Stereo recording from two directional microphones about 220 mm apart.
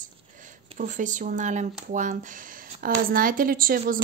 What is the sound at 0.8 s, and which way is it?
A woman's voice, 35° right (ahead or behind).